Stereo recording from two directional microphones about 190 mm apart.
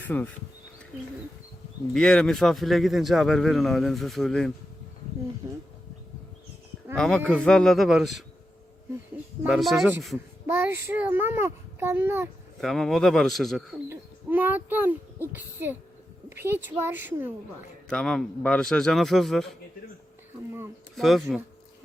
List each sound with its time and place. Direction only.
0.0 s speech: 10° left (ahead or behind)
1.9 s speech: 5° left (ahead or behind)
6.9 s speech: 5° left (ahead or behind)
9.4 s speech: centre (ahead or behind)
10.4 s a child's voice: 10° right (ahead or behind)
12.5 s speech: centre (ahead or behind)
13.8 s a child's voice: 10° right (ahead or behind)
17.8 s speech: 5° left (ahead or behind)
20.9 s speech: centre (ahead or behind)